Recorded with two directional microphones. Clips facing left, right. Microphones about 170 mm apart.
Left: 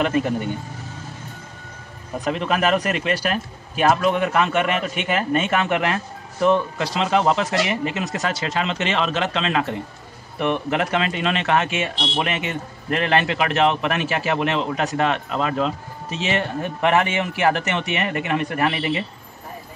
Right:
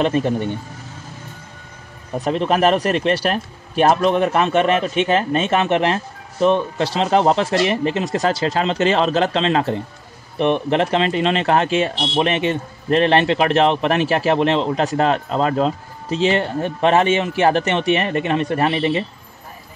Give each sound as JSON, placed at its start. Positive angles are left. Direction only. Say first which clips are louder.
{"t": 0.0, "sound": "speech", "louder": "right 2 dB", "side_deg": -25}
{"t": 2.2, "sound": "speech", "louder": "right 5 dB", "side_deg": -30}